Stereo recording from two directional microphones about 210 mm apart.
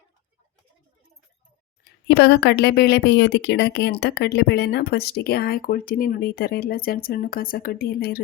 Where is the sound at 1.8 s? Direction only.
55° left (ahead or behind).